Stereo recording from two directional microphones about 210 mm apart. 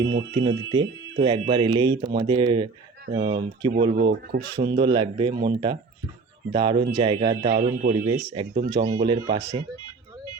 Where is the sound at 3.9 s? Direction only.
55° right (ahead or behind).